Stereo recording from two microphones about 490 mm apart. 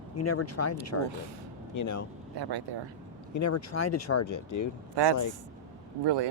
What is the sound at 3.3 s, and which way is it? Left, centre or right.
Speech, left.